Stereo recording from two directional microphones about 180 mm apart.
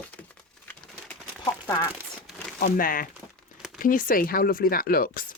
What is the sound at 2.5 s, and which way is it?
Speech, 50° left (ahead or behind).